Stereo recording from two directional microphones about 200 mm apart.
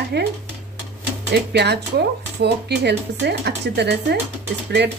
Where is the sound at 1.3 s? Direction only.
55° right (ahead or behind).